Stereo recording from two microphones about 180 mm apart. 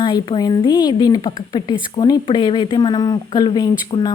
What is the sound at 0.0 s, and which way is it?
Speech, 25° left (ahead or behind).